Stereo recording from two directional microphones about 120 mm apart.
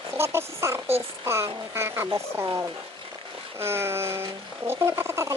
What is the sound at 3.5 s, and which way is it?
Speech, 20° right (ahead or behind).